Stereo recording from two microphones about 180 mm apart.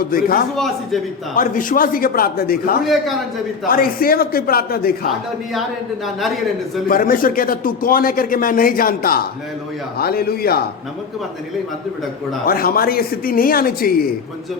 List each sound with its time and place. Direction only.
0.0 s speech: 55° left (ahead or behind)
0.5 s a man's voice: centre (ahead or behind)
1.4 s speech: 50° left (ahead or behind)
2.8 s a man's voice: centre (ahead or behind)
3.7 s speech: 55° left (ahead or behind)
6.8 s speech: 50° left (ahead or behind)
12.5 s speech: 55° left (ahead or behind)